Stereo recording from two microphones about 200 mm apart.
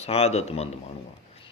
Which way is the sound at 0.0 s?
30° left (ahead or behind).